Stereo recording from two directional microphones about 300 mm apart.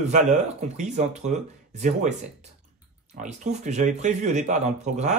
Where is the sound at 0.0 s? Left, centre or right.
Right.